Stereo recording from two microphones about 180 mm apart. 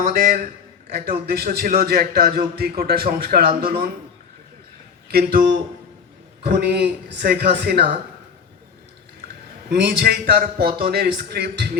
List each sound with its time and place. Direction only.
0.0 s a man's voice: 50° right (ahead or behind)
1.3 s a man's voice: 60° right (ahead or behind)
5.0 s speech: 55° right (ahead or behind)
6.5 s a man's voice: 55° right (ahead or behind)
9.6 s a man's voice: 60° right (ahead or behind)